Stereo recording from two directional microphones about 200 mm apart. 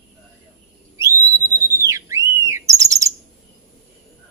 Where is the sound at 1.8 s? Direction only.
15° right (ahead or behind).